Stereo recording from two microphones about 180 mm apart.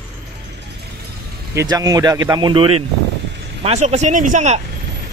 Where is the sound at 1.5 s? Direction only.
20° right (ahead or behind).